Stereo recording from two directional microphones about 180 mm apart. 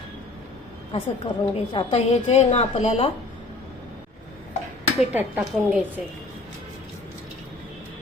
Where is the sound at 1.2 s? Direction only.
25° left (ahead or behind).